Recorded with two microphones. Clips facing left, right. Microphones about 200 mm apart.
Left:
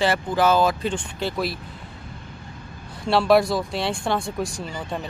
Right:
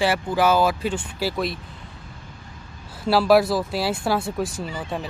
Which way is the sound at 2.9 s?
5° right (ahead or behind).